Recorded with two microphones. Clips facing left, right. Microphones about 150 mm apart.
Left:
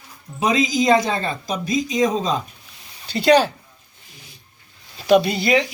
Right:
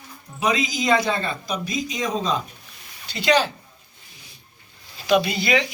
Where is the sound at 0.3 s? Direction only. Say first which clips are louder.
Left 4 dB; 40° left (ahead or behind).